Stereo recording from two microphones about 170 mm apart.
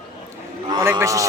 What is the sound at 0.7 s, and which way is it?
Speech, 20° right (ahead or behind).